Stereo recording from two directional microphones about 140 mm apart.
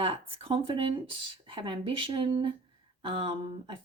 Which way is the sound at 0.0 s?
45° right (ahead or behind).